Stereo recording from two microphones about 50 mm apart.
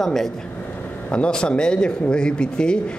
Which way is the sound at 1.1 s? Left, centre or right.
Centre.